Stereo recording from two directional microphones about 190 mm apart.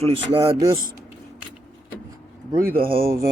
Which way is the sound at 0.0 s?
30° right (ahead or behind).